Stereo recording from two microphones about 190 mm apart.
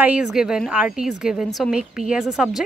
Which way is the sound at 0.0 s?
5° right (ahead or behind).